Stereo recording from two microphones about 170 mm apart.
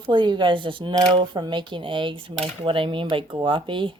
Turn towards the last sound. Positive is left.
turn(degrees=-30)  # may be behind; listen again after turning